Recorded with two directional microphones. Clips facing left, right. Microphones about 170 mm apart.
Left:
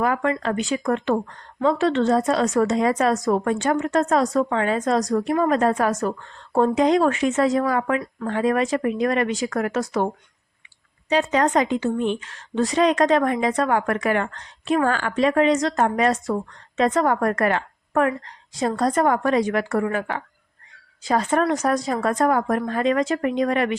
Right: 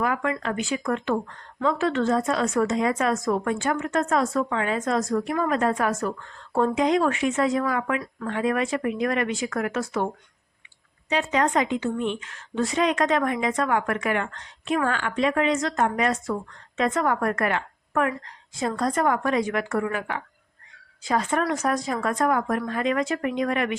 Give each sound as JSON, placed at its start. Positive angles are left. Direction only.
{"t": 0.0, "sound": "a woman's voice", "side_deg": 35}
{"t": 11.1, "sound": "a woman's voice", "side_deg": 40}